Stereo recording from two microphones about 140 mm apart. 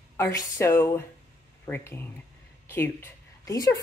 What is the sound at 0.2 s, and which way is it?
A woman's voice, 20° left (ahead or behind).